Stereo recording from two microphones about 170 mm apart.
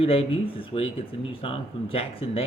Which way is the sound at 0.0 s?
35° left (ahead or behind).